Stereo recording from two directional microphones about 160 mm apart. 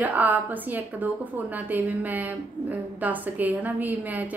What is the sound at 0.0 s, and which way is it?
A woman's voice, 10° right (ahead or behind).